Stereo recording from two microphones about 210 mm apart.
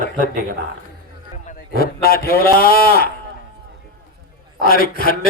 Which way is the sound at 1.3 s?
35° left (ahead or behind).